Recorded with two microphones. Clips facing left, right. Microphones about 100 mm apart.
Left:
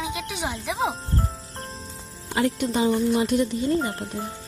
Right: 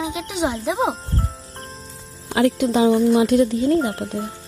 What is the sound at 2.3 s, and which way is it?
Speech, 90° right.